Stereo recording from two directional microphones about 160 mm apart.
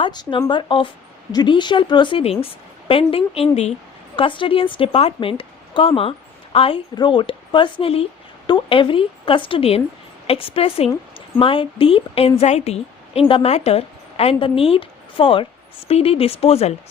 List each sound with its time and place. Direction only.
0.0 s a woman's voice: 30° left (ahead or behind)